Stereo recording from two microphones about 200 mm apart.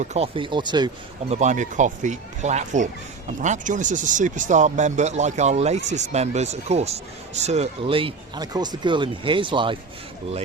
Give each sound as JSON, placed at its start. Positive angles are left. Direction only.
{"t": 0.0, "sound": "speech", "side_deg": -35}
{"t": 1.3, "sound": "speech", "side_deg": -35}